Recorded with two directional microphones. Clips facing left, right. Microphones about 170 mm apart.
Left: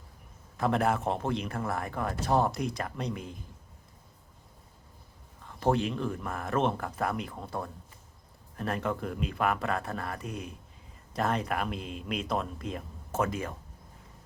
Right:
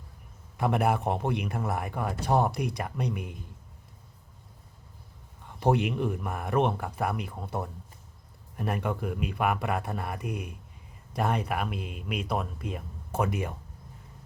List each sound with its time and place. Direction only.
0.5 s speech: 10° right (ahead or behind)
5.5 s a sound: 15° right (ahead or behind)
5.9 s speech: 15° right (ahead or behind)
8.5 s speech: 10° right (ahead or behind)